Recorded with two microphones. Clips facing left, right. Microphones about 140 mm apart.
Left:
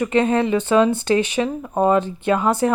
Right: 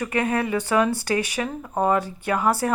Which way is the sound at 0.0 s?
25° left (ahead or behind).